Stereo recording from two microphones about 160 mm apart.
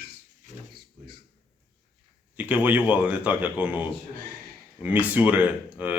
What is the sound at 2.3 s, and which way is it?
Speech, 10° right (ahead or behind).